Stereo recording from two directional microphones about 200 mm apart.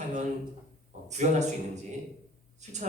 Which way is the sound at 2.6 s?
35° right (ahead or behind).